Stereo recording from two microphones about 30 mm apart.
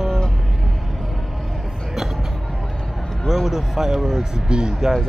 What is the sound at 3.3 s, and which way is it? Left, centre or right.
Speech, centre.